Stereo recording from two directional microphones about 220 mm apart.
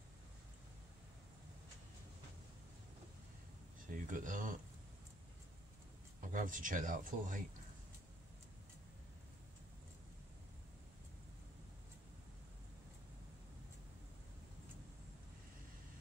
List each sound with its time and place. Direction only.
3.9 s speech: 35° right (ahead or behind)
6.2 s speech: 35° right (ahead or behind)